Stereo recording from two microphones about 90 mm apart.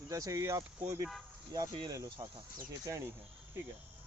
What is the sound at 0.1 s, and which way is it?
Speech, 40° right (ahead or behind).